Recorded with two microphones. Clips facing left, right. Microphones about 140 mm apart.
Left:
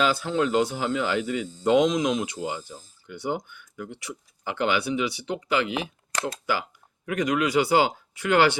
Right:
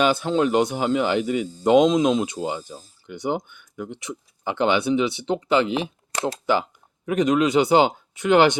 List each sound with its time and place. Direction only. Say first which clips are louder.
0.0 s speech: right 4 dB; 25° right (ahead or behind)